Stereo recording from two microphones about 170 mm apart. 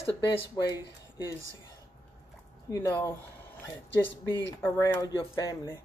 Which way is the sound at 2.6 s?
15° left (ahead or behind).